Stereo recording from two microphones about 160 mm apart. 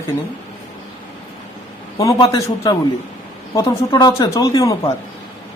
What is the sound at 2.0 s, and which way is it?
Speech, 20° left (ahead or behind).